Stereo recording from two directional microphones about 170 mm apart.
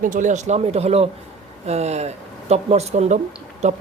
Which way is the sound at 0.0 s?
50° right (ahead or behind).